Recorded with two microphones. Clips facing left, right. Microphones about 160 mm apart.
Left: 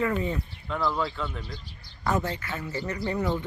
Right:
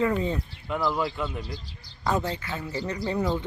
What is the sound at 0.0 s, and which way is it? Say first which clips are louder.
Speech: right 2 dB; 25° right (ahead or behind).